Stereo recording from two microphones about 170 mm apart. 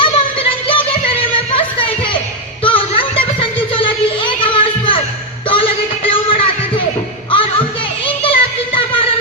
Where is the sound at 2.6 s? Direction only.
30° left (ahead or behind).